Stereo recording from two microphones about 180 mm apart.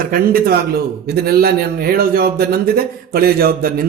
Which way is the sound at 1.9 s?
55° right (ahead or behind).